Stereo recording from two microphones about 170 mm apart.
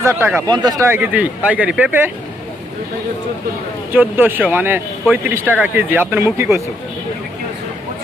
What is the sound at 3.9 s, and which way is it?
Speech, 10° right (ahead or behind).